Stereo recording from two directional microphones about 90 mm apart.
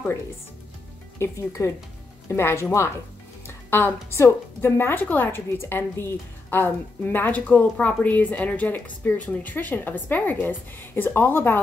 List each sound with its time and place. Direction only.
1.2 s speech: 30° left (ahead or behind)